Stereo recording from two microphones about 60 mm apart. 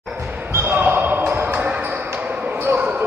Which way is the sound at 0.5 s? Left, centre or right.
Right.